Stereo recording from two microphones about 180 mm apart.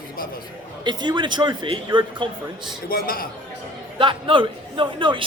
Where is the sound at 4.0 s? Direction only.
30° right (ahead or behind).